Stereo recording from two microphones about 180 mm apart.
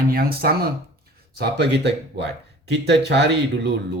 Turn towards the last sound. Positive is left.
turn(degrees=-70)  # may be behind; listen again after turning